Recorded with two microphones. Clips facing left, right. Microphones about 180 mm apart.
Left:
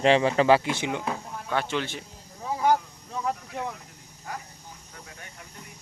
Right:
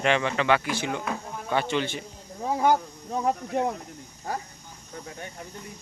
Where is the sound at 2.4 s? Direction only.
45° right (ahead or behind); by 5.5 s 30° right (ahead or behind).